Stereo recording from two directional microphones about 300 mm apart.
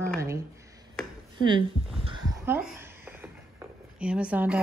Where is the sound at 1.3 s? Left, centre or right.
Centre.